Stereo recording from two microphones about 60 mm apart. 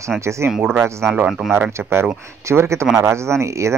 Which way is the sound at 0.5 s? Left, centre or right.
Centre.